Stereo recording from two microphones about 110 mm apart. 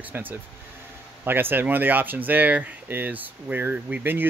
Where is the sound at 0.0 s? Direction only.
15° right (ahead or behind).